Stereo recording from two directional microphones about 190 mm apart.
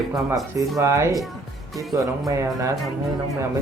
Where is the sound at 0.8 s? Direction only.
15° right (ahead or behind).